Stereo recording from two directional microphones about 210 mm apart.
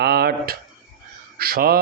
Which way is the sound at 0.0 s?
50° right (ahead or behind).